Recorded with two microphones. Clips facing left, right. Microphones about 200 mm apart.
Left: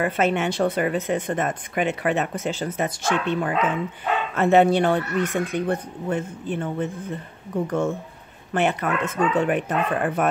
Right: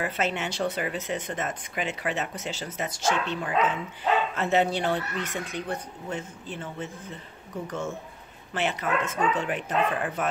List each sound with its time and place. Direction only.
0.0 s speech: 55° left (ahead or behind)